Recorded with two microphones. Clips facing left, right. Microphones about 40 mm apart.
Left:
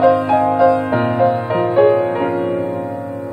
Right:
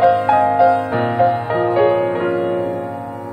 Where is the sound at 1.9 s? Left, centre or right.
Right.